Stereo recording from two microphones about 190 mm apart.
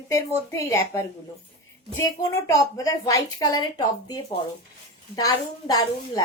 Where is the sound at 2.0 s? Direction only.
15° left (ahead or behind).